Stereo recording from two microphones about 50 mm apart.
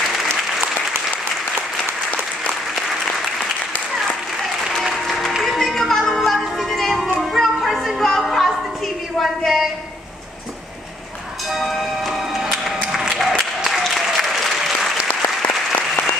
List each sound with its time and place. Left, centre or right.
4.8 s music: centre
9.2 s a sound: centre
11.5 s music: centre
13.7 s applause: centre
15.2 s applause: left